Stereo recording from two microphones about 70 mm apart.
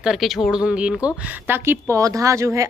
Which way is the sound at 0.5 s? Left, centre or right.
Centre.